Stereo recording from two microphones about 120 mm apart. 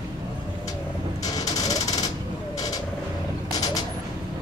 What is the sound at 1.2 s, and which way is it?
Mechanisms, 30° left (ahead or behind).